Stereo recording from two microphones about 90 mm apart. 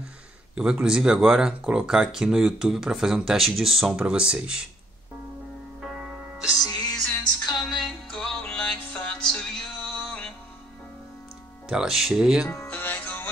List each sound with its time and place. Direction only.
0.6 s speech: 10° right (ahead or behind)
5.8 s music: centre (ahead or behind)
6.6 s music: 50° left (ahead or behind)
7.6 s music: centre (ahead or behind)
11.7 s speech: 5° right (ahead or behind)
12.6 s music: 20° left (ahead or behind)